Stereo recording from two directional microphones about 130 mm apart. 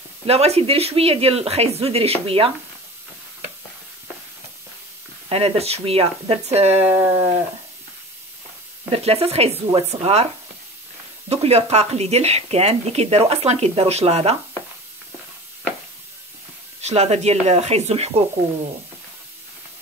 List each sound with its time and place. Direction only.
0.3 s speech: 50° right (ahead or behind)
5.3 s speech: 50° right (ahead or behind)
8.9 s speech: 50° right (ahead or behind)
11.2 s speech: 55° right (ahead or behind)
16.8 s speech: 55° right (ahead or behind)